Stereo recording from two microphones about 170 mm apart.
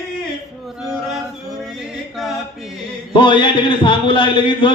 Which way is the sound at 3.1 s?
30° left (ahead or behind).